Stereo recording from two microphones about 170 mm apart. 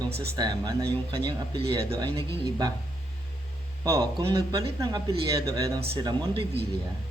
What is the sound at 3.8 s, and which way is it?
Speech, 20° right (ahead or behind).